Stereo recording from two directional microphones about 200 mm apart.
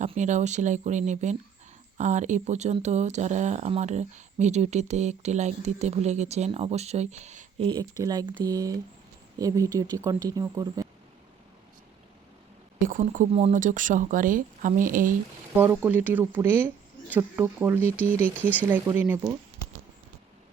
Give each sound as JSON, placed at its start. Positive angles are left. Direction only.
{"t": 0.0, "sound": "speech", "side_deg": -35}
{"t": 12.8, "sound": "speech", "side_deg": -40}
{"t": 15.5, "sound": "speech", "side_deg": -10}
{"t": 18.3, "sound": "speech", "side_deg": 10}
{"t": 18.9, "sound": "speech", "side_deg": -10}